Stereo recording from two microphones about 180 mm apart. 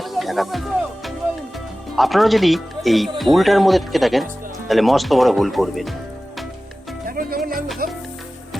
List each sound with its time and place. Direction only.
0.0 s music: centre (ahead or behind)
2.0 s speech: centre (ahead or behind)
7.1 s music: 55° right (ahead or behind)